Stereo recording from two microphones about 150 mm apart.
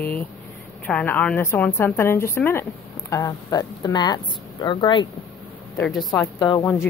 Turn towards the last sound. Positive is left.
turn(degrees=25)  # may be behind; listen again after turning